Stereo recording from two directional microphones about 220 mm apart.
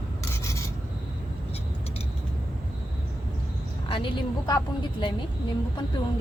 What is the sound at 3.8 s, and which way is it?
A woman's voice, 25° left (ahead or behind).